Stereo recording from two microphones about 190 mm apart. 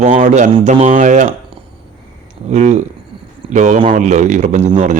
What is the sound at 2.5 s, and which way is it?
A man's voice, 35° right (ahead or behind).